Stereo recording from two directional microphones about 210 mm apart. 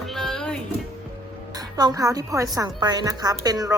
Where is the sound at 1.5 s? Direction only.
20° right (ahead or behind).